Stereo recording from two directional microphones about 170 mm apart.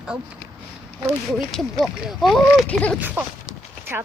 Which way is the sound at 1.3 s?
Centre (ahead or behind).